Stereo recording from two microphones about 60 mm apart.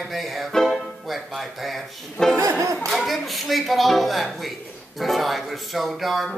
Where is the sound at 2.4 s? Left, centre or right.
Right.